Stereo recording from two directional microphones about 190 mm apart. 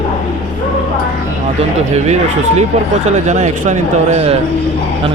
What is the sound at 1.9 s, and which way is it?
Speech, 35° right (ahead or behind).